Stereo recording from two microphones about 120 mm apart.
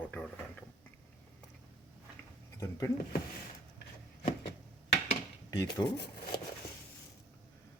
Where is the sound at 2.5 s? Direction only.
25° left (ahead or behind).